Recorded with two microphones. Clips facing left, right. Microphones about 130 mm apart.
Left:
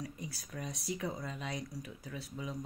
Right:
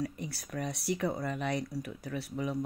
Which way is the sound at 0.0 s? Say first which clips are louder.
Right 7 dB; 70° right (ahead or behind).